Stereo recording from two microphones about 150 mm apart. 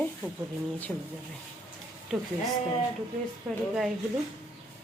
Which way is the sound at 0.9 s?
10° left (ahead or behind).